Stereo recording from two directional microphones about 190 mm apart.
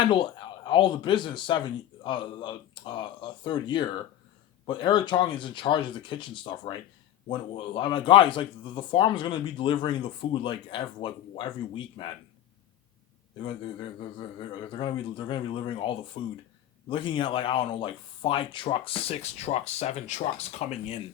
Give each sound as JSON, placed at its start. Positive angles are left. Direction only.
{"t": 0.0, "sound": "speech", "side_deg": 25}
{"t": 13.4, "sound": "speech", "side_deg": 25}